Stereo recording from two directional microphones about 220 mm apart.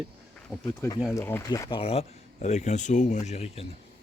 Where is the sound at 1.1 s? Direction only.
10° left (ahead or behind); by 3.7 s 30° left (ahead or behind).